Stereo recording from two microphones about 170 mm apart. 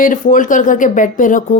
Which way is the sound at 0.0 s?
50° left (ahead or behind).